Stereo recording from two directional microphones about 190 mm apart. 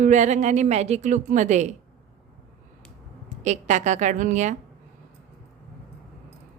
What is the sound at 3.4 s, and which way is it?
Speech, 40° right (ahead or behind).